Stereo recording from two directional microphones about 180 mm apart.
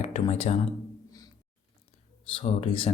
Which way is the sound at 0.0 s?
35° left (ahead or behind).